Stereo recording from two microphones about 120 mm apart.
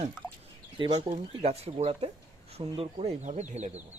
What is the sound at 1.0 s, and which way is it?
Speech, 65° right (ahead or behind).